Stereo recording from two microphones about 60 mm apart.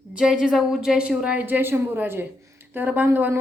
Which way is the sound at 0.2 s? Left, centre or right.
Centre.